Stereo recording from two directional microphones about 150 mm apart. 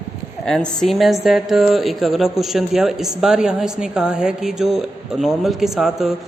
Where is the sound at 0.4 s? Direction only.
5° left (ahead or behind).